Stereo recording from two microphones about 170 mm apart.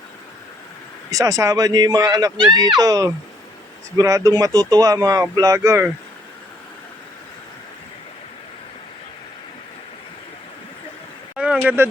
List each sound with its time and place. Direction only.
1.1 s speech: 20° right (ahead or behind)
11.3 s vehicle: 5° right (ahead or behind)